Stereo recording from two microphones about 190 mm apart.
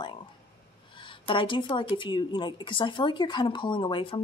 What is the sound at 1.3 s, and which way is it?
Speech, 25° left (ahead or behind).